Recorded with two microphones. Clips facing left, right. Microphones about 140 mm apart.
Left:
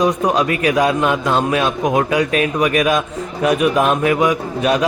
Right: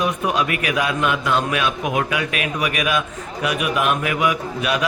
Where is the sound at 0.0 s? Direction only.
35° left (ahead or behind).